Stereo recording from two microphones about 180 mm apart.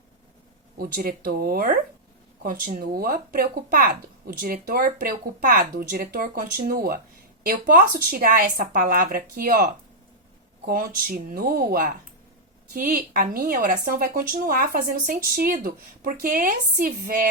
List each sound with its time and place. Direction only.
0.8 s speech: 55° right (ahead or behind)
10.7 s speech: 50° right (ahead or behind)